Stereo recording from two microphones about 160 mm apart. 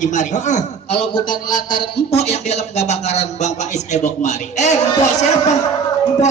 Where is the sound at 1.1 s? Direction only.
25° left (ahead or behind).